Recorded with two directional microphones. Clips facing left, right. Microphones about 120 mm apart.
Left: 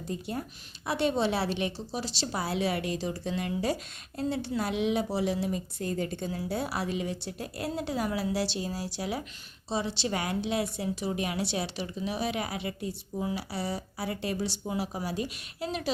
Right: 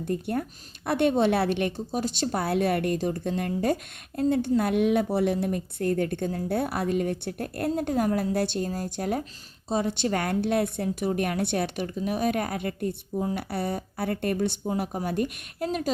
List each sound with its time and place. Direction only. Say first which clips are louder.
0.0 s a woman's voice: right 6 dB; 55° right (ahead or behind)